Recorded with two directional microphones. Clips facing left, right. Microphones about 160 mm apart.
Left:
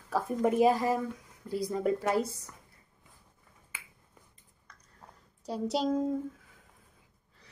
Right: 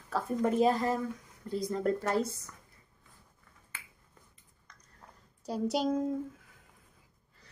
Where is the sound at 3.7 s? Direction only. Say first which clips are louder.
Left 1 dB; 10° left (ahead or behind).